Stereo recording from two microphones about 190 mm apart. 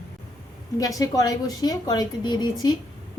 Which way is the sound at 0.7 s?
20° left (ahead or behind).